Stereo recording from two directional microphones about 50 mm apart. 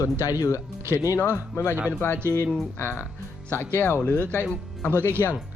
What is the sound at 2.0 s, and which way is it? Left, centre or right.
Speech, left.